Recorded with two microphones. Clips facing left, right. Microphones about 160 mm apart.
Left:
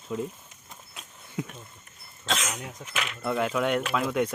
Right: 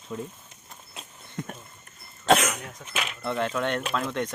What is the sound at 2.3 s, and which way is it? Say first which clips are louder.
Speech: right 10 dB; 60° right (ahead or behind).